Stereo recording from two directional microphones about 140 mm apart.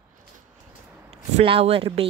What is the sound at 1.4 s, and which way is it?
Speech, 45° right (ahead or behind).